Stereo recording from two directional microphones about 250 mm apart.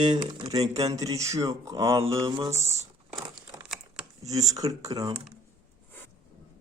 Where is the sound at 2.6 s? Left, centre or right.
Right.